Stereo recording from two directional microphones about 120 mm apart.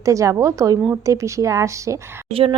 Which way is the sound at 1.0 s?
25° right (ahead or behind).